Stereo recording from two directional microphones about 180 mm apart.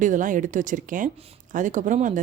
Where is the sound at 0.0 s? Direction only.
45° right (ahead or behind).